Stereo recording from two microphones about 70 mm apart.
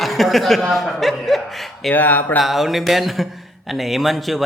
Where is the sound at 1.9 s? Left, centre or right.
Left.